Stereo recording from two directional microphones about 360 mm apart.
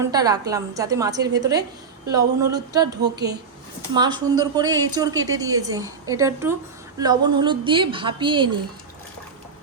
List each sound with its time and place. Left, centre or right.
0.0 s a woman's voice: centre
3.0 s a woman's voice: right
3.9 s a woman's voice: centre